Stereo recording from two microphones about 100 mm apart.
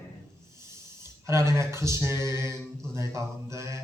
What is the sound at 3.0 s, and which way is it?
Music, 30° right (ahead or behind).